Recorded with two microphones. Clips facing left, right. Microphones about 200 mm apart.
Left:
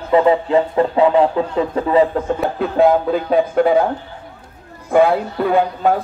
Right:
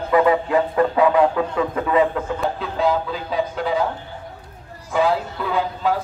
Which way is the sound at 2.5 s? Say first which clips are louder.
Left 10 dB; 55° left (ahead or behind).